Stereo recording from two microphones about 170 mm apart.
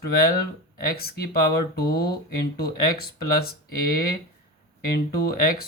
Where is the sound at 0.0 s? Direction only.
60° left (ahead or behind).